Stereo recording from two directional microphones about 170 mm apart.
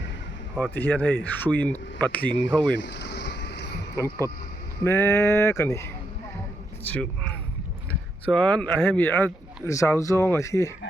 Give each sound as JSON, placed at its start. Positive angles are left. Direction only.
{"t": 0.5, "sound": "speech", "side_deg": 5}
{"t": 2.4, "sound": "a sound", "side_deg": 85}
{"t": 4.8, "sound": "speech", "side_deg": 15}
{"t": 6.8, "sound": "speech", "side_deg": 10}